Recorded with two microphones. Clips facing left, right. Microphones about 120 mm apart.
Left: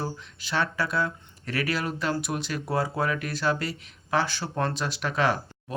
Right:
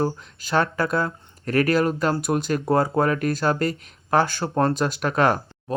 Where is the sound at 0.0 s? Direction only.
45° right (ahead or behind).